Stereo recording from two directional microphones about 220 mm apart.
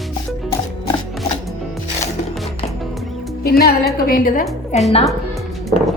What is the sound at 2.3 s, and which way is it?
Music, centre (ahead or behind).